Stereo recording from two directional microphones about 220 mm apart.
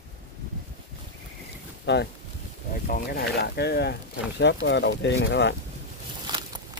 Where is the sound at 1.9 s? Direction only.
50° left (ahead or behind).